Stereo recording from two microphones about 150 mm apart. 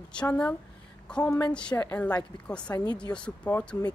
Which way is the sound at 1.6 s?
10° left (ahead or behind).